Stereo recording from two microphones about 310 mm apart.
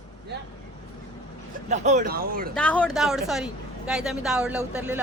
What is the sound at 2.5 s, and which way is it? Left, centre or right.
A woman's voice, centre.